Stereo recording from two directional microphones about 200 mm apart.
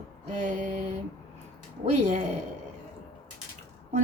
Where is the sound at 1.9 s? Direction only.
35° right (ahead or behind).